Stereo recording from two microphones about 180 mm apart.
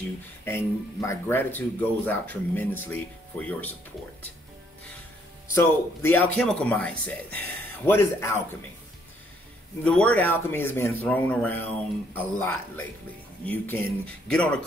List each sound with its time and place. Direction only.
0.5 s speech: 15° left (ahead or behind)
5.5 s speech: 15° left (ahead or behind)
9.8 s speech: 5° left (ahead or behind)